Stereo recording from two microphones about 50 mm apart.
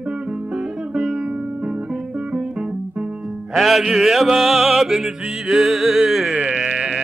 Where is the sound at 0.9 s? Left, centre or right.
Centre.